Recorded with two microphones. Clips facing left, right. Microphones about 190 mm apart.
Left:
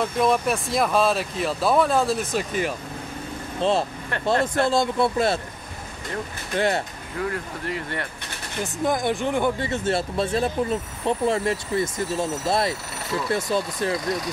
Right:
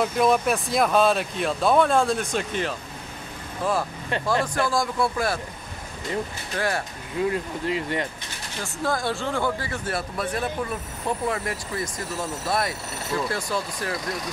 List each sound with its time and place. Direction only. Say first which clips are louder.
0.0 s speech: right 1 dB; centre (ahead or behind)
3.6 s speech: left 3 dB; 25° left (ahead or behind)
6.5 s speech: left 4 dB; 25° left (ahead or behind)
7.2 s speech: right 3 dB; 20° right (ahead or behind)
8.8 s speech: left 3 dB; 20° left (ahead or behind)